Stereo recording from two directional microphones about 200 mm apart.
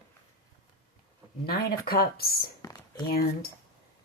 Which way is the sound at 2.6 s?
20° left (ahead or behind).